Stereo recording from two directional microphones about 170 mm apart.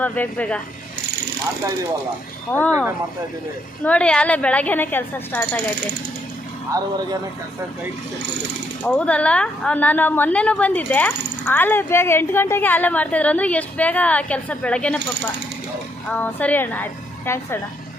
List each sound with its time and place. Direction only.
0.0 s a woman's voice: 10° left (ahead or behind)
2.5 s a woman's voice: 10° left (ahead or behind)
3.8 s a woman's voice: 5° left (ahead or behind)
6.7 s speech: 20° right (ahead or behind)
8.8 s a woman's voice: 10° left (ahead or behind)